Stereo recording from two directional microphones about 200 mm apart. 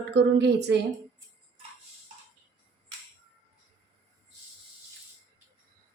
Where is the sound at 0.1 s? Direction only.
60° right (ahead or behind).